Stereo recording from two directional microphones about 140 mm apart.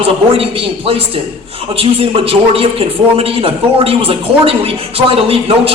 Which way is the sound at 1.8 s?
40° right (ahead or behind).